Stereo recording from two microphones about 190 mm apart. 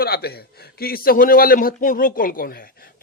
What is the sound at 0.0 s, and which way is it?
A man's voice, 55° left (ahead or behind).